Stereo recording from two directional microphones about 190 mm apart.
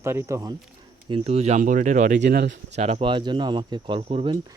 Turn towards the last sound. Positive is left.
turn(degrees=-30)  # may be behind; listen again after turning